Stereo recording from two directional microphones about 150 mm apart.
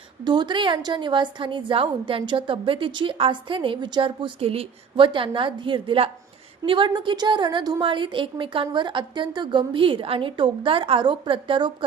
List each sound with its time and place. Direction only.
0.3 s a woman's voice: 30° right (ahead or behind)